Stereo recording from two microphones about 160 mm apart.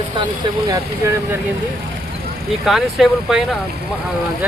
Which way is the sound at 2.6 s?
Centre (ahead or behind).